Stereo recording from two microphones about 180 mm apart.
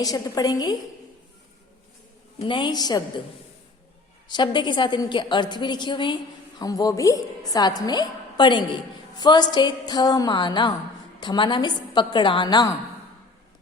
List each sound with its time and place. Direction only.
0.0 s a woman's voice: 20° left (ahead or behind)
2.4 s a woman's voice: 25° left (ahead or behind)
4.3 s a woman's voice: 25° left (ahead or behind)